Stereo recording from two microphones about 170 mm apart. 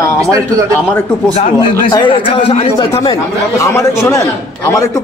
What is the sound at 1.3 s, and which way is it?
Speech, 35° left (ahead or behind).